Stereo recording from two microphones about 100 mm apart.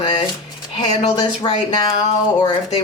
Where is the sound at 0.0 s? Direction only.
50° left (ahead or behind).